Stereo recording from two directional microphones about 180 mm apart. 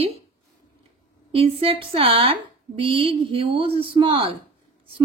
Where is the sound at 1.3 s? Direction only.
30° right (ahead or behind).